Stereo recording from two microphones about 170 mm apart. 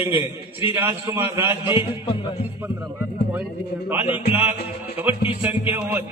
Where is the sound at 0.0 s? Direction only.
10° right (ahead or behind).